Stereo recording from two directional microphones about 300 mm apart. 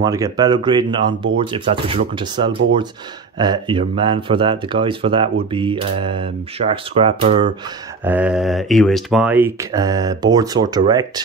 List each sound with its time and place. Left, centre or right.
0.0 s speech: centre
8.0 s speech: centre